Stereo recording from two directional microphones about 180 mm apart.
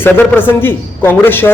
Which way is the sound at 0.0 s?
10° left (ahead or behind).